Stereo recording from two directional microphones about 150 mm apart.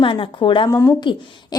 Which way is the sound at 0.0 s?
35° left (ahead or behind).